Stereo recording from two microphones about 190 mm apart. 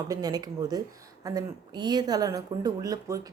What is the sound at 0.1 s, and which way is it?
A woman's voice, 20° right (ahead or behind).